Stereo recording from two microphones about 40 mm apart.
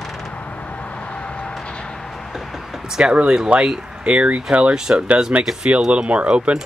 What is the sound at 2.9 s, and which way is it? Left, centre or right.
Speech, right.